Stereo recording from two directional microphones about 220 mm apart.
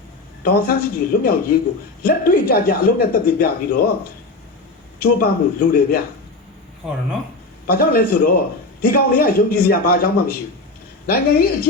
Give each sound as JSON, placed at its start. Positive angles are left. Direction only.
{"t": 0.4, "sound": "a man's voice", "side_deg": 40}
{"t": 5.0, "sound": "a man's voice", "side_deg": 40}
{"t": 7.7, "sound": "a man's voice", "side_deg": 40}